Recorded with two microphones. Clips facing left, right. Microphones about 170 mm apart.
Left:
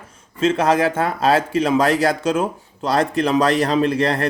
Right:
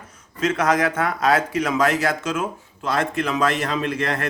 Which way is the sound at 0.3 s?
30° left (ahead or behind).